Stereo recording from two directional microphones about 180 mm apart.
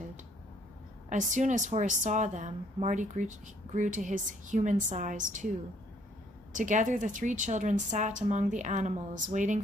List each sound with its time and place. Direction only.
1.0 s a woman's voice: 45° right (ahead or behind)
6.5 s a woman's voice: 45° right (ahead or behind)